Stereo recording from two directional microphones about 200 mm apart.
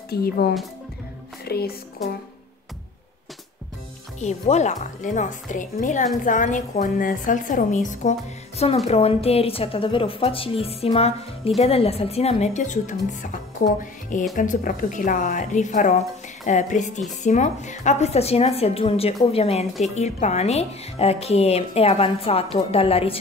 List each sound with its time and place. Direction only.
0.1 s speech: 50° left (ahead or behind)
4.2 s speech: 35° left (ahead or behind)